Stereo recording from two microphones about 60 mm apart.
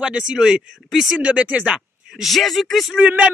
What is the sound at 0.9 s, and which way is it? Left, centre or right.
Speech, centre.